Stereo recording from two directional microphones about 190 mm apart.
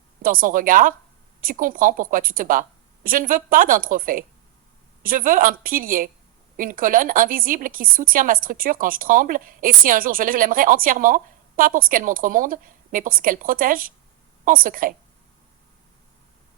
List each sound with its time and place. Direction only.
0.2 s speech: 50° right (ahead or behind)